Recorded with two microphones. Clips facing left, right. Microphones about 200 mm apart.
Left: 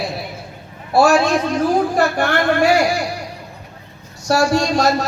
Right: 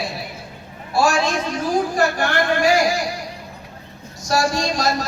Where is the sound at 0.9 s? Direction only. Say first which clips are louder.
Left 5 dB; 60° left (ahead or behind).